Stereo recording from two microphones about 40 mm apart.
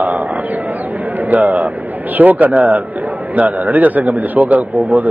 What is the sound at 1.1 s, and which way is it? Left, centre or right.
A man's voice, right.